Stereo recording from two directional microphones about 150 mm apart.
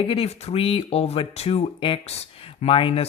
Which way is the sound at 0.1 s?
40° left (ahead or behind).